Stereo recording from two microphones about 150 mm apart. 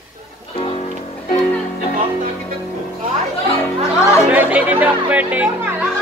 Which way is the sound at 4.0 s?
20° left (ahead or behind).